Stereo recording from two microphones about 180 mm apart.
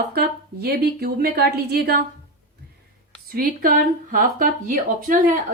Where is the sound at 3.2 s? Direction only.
50° right (ahead or behind).